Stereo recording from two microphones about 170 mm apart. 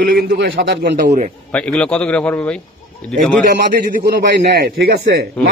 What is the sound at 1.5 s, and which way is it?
Speech, 5° left (ahead or behind).